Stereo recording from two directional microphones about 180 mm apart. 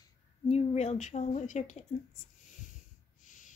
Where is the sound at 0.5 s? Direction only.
35° left (ahead or behind).